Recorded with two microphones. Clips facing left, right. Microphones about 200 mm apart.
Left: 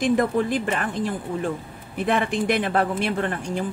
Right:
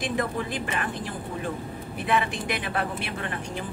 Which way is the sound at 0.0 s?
50° left (ahead or behind).